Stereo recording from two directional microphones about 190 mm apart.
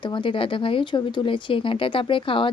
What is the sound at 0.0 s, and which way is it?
Speech, 25° left (ahead or behind).